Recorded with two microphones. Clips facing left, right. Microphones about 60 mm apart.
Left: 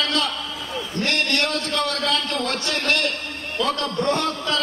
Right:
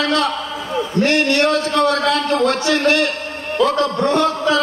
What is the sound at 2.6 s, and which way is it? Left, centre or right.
Speech, right.